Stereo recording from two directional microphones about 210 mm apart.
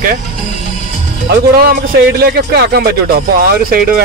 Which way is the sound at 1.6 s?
50° right (ahead or behind).